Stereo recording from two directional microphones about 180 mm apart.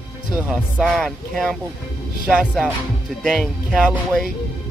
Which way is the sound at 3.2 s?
Centre (ahead or behind).